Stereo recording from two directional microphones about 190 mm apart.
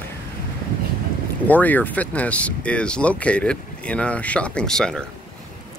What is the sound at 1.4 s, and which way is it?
Speech, 10° left (ahead or behind).